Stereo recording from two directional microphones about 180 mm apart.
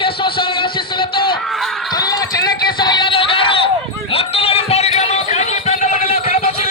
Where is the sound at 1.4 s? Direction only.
Centre (ahead or behind).